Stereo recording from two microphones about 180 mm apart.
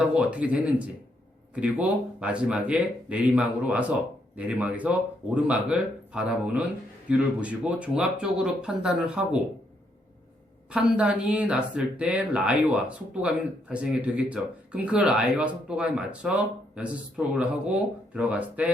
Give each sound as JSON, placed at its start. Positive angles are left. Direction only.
{"t": 0.0, "sound": "speech", "side_deg": -5}
{"t": 10.7, "sound": "speech", "side_deg": -5}